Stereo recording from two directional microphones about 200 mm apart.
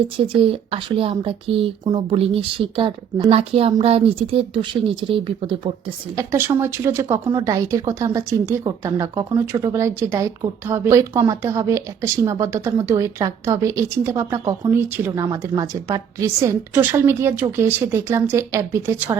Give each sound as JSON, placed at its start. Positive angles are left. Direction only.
{"t": 0.2, "sound": "a woman's voice", "side_deg": -30}
{"t": 6.1, "sound": "speech", "side_deg": -10}